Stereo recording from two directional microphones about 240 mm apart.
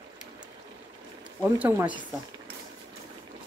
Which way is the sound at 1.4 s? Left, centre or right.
Centre.